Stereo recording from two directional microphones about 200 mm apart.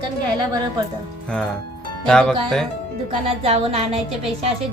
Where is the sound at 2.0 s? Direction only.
5° left (ahead or behind).